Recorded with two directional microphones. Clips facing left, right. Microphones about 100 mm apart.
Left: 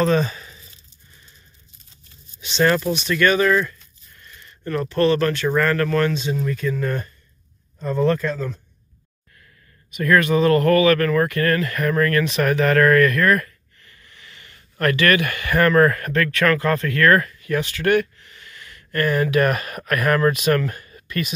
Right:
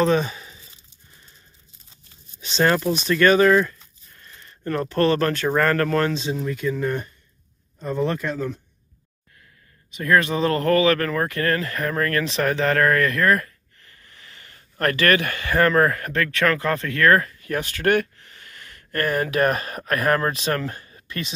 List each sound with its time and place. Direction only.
0.0 s speech: 15° right (ahead or behind)
2.4 s speech: 35° right (ahead or behind); by 8.5 s 15° right (ahead or behind)
9.8 s speech: 25° right (ahead or behind)
17.5 s speech: 45° right (ahead or behind); by 21.3 s 25° right (ahead or behind)